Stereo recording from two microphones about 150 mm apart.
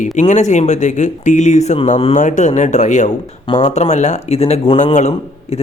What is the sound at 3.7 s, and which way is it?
A man's voice, 50° left (ahead or behind).